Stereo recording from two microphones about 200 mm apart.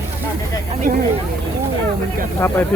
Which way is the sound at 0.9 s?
45° right (ahead or behind).